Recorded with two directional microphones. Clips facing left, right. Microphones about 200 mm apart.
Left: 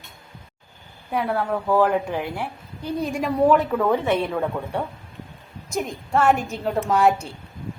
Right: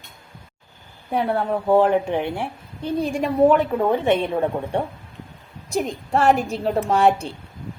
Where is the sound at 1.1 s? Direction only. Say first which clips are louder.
Right 2 dB; 30° right (ahead or behind).